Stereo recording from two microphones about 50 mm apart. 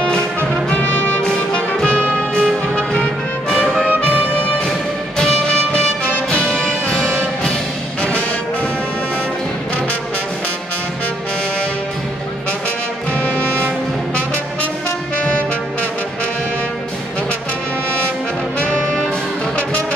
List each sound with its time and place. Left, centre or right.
2.1 s music: centre
5.1 s music: centre
18.6 s brass instrument: left